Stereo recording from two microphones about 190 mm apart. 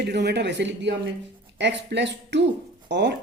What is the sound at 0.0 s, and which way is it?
Speech, 60° right (ahead or behind).